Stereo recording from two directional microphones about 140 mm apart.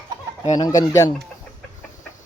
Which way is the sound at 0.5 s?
25° left (ahead or behind).